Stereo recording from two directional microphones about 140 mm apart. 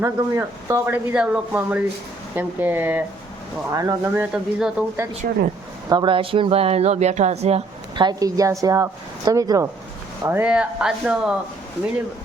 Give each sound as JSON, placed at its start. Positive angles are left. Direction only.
{"t": 0.0, "sound": "a woman's voice", "side_deg": -20}
{"t": 1.1, "sound": "a woman's voice", "side_deg": -5}
{"t": 5.2, "sound": "speech", "side_deg": -85}
{"t": 5.9, "sound": "a woman's voice", "side_deg": -35}
{"t": 7.9, "sound": "a woman's voice", "side_deg": -30}
{"t": 10.2, "sound": "speech", "side_deg": -10}